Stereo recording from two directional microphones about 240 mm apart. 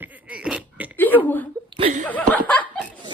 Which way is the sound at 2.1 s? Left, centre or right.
Centre.